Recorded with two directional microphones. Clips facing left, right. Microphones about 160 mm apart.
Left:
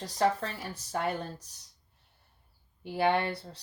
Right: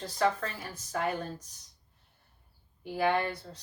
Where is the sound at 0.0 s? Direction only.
35° left (ahead or behind).